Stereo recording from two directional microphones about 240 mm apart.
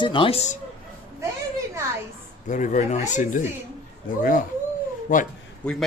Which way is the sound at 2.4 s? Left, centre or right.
Left.